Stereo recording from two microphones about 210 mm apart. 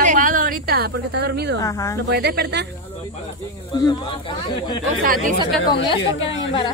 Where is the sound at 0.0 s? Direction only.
40° right (ahead or behind).